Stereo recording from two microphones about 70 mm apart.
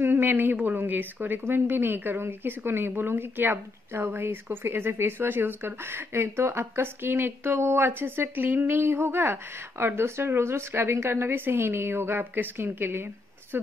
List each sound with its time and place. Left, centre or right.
0.0 s speech: right